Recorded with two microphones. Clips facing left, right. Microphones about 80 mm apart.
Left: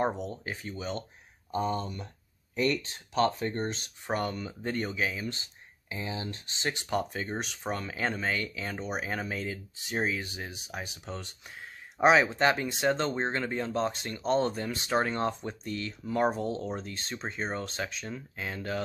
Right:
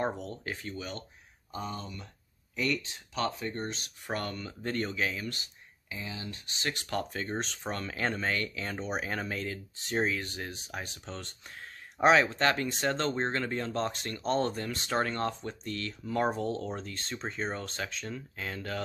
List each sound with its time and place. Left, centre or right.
0.0 s speech: centre
1.5 s speech: left
4.1 s speech: centre
5.3 s speech: left; by 18.8 s centre